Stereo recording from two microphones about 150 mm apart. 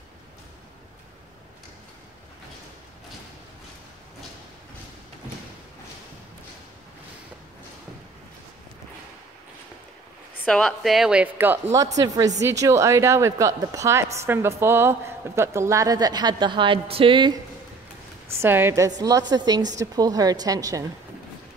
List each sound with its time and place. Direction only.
10.4 s speech: 5° left (ahead or behind); by 17.4 s 30° right (ahead or behind)
18.4 s speech: 15° right (ahead or behind)